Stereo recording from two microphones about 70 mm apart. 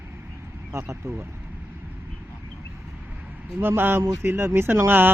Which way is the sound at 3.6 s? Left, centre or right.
Right.